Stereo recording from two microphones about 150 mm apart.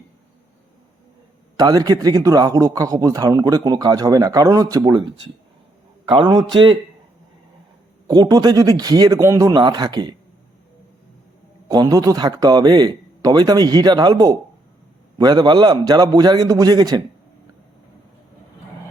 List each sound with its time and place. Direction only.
1.5 s a man's voice: 25° right (ahead or behind)
8.0 s a man's voice: 25° right (ahead or behind)
11.7 s a man's voice: 25° right (ahead or behind)